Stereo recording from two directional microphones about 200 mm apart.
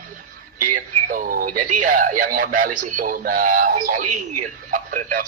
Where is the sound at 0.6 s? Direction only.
45° right (ahead or behind).